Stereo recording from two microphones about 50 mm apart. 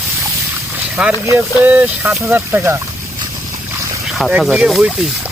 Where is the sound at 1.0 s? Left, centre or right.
Centre.